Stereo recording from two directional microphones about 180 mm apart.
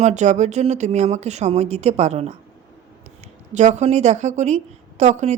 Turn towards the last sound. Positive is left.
turn(degrees=-40)  # may be behind; listen again after turning